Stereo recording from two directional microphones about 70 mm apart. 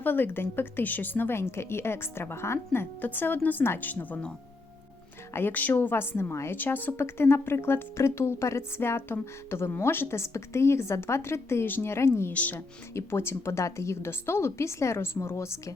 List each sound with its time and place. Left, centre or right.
0.0 s a woman's voice: left
3.0 s a woman's voice: left
5.3 s a woman's voice: left
12.3 s a woman's voice: left
12.5 s a woman's voice: left